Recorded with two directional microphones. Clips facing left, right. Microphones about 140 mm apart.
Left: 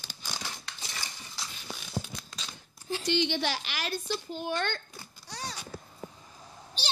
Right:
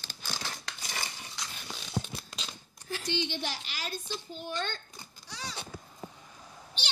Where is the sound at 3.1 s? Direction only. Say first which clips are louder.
Left 6 dB; 85° left; by 4.8 s 65° left (ahead or behind).